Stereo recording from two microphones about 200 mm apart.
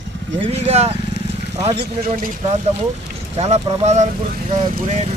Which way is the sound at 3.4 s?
35° right (ahead or behind).